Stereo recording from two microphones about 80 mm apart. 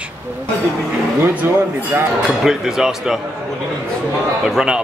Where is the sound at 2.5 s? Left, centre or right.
Centre.